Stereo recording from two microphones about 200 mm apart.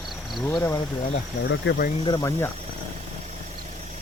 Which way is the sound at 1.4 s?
60° left (ahead or behind).